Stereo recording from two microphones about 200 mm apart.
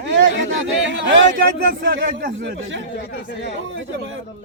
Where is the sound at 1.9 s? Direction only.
65° right (ahead or behind).